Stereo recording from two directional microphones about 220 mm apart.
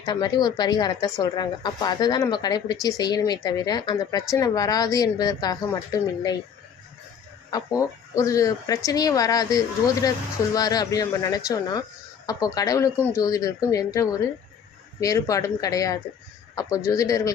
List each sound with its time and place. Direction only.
0.0 s a woman's voice: 20° left (ahead or behind)
7.5 s speech: 15° left (ahead or behind)